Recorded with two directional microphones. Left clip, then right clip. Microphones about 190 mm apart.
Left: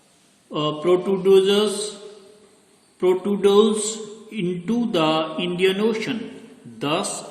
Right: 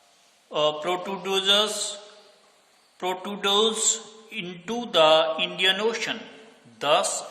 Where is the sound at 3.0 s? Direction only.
25° right (ahead or behind).